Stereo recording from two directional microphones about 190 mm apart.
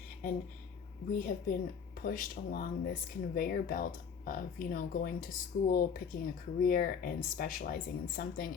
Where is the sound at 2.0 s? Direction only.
45° left (ahead or behind).